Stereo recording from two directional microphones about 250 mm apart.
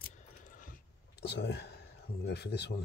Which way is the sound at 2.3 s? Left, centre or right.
Left.